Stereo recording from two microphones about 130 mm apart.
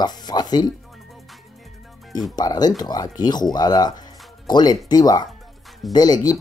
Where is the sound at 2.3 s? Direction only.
30° left (ahead or behind).